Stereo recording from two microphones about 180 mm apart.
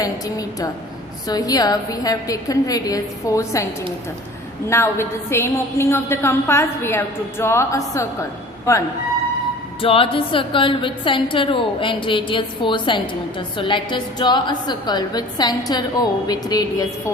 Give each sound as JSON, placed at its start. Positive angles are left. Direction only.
{"t": 0.0, "sound": "a woman's voice", "side_deg": 20}
{"t": 4.7, "sound": "a woman's voice", "side_deg": 15}
{"t": 9.8, "sound": "a woman's voice", "side_deg": 30}